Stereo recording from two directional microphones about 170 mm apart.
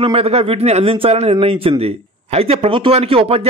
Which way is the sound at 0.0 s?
35° right (ahead or behind).